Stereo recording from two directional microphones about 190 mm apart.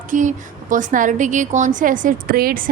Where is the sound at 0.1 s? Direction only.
45° right (ahead or behind).